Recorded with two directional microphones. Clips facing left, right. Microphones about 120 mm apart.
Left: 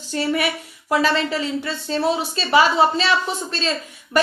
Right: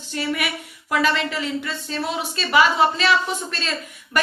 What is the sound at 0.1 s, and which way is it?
A woman's voice, 35° left (ahead or behind).